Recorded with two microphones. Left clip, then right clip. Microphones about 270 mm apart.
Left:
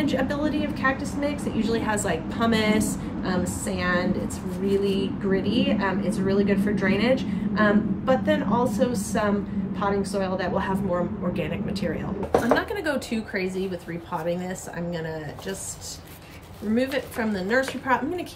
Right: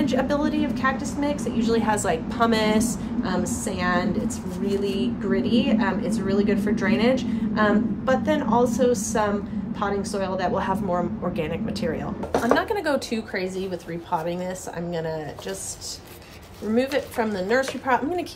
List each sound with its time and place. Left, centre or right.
0.0 s a woman's voice: centre
16.7 s a woman's voice: centre